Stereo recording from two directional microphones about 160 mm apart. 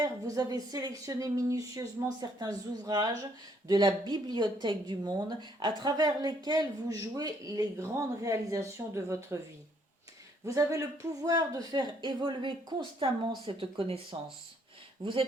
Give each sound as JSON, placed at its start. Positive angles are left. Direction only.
{"t": 0.0, "sound": "a woman's voice", "side_deg": -20}
{"t": 10.4, "sound": "a woman's voice", "side_deg": -20}